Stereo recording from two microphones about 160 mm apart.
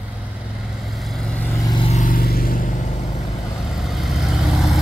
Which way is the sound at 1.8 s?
40° left (ahead or behind).